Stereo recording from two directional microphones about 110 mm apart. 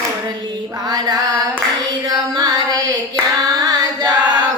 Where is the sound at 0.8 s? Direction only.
35° right (ahead or behind).